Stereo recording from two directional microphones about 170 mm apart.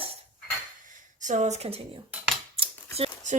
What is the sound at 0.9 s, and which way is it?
Speech, 45° right (ahead or behind).